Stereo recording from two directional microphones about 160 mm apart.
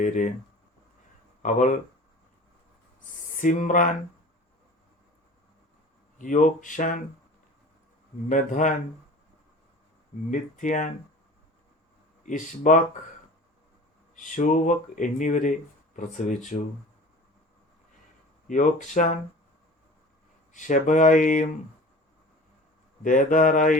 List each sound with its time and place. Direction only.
0.0 s speech: 50° left (ahead or behind)
1.4 s speech: 50° left (ahead or behind)
3.3 s speech: 55° left (ahead or behind)
6.1 s speech: 55° left (ahead or behind)
8.3 s speech: 50° left (ahead or behind)
10.3 s speech: 50° left (ahead or behind)
12.2 s speech: 55° left (ahead or behind)
14.2 s speech: 55° left (ahead or behind)
18.4 s speech: 55° left (ahead or behind)
20.5 s speech: 50° left (ahead or behind)
23.0 s speech: 55° left (ahead or behind)